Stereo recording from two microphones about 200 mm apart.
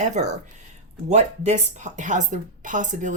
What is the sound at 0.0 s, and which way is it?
Speech, 35° right (ahead or behind).